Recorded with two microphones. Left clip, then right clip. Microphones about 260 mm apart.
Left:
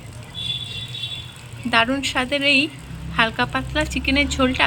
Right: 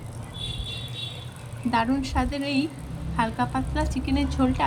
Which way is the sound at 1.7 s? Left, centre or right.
Centre.